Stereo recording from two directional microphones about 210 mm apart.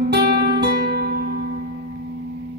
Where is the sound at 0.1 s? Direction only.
50° right (ahead or behind).